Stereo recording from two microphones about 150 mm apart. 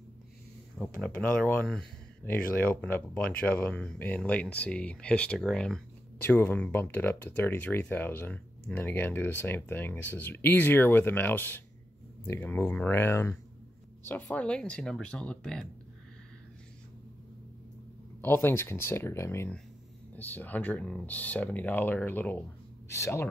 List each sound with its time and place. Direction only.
0.7 s speech: 10° left (ahead or behind)
18.2 s speech: 15° left (ahead or behind)